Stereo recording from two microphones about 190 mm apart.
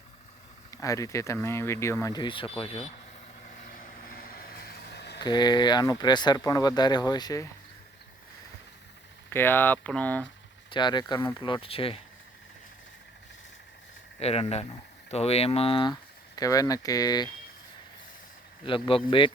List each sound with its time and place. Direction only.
0.7 s speech: 15° left (ahead or behind); by 2.9 s 30° left (ahead or behind)
3.6 s vehicle: 45° left (ahead or behind); by 5.2 s 60° left (ahead or behind)
5.2 s speech: 25° left (ahead or behind)
9.3 s speech: 10° left (ahead or behind)
10.7 s speech: 25° left (ahead or behind)
14.2 s speech: 35° left (ahead or behind)
18.6 s speech: 30° left (ahead or behind)